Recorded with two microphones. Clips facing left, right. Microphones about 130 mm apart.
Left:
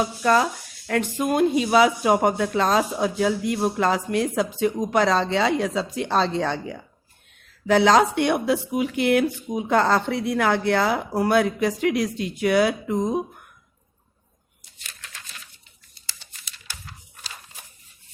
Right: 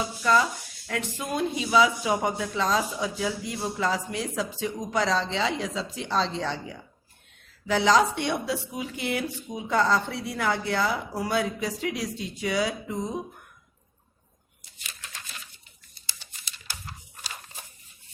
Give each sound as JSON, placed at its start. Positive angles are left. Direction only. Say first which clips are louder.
{"t": 0.0, "sound": "speech", "louder": "left 4 dB", "side_deg": 60}